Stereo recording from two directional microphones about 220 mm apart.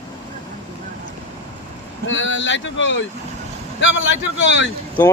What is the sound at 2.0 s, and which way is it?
Speech, 60° left (ahead or behind).